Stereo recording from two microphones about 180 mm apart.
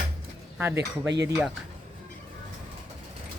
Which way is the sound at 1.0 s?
75° right (ahead or behind).